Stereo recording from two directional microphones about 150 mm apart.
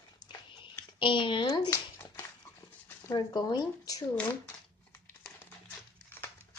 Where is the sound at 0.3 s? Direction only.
35° left (ahead or behind).